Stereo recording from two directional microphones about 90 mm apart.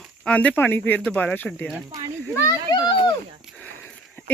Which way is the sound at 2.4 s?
35° left (ahead or behind).